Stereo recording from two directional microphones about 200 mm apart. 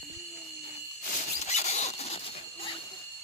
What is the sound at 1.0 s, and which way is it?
Rodents, 35° left (ahead or behind).